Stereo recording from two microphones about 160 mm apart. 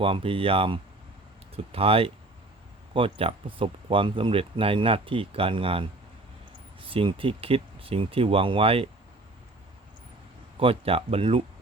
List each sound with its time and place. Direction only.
0.0 s speech: 35° right (ahead or behind)
10.6 s speech: 35° right (ahead or behind)